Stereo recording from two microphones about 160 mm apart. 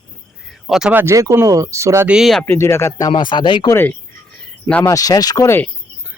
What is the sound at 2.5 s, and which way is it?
Speech, 15° left (ahead or behind).